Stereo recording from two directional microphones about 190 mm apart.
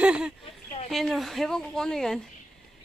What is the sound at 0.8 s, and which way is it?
Speech, centre (ahead or behind).